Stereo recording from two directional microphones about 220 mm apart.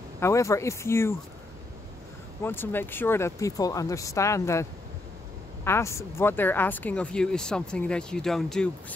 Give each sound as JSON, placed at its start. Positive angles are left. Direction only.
{"t": 0.2, "sound": "speech", "side_deg": 15}
{"t": 2.4, "sound": "speech", "side_deg": 10}